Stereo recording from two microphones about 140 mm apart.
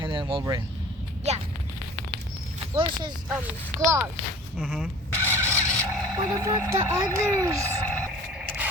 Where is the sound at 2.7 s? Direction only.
40° right (ahead or behind).